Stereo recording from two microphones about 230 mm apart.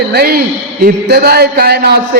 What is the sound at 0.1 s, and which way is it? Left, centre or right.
A man's voice, right.